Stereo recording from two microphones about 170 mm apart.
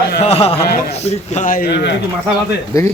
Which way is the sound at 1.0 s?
40° left (ahead or behind).